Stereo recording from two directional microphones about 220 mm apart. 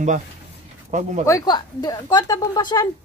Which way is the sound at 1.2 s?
15° left (ahead or behind).